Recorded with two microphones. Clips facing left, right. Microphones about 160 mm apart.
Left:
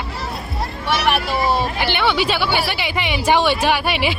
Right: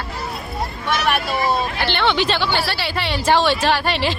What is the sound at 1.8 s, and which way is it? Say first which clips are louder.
Speech: even; 10° left (ahead or behind).